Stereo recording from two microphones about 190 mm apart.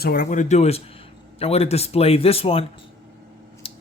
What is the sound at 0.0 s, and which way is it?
Speech, 50° left (ahead or behind).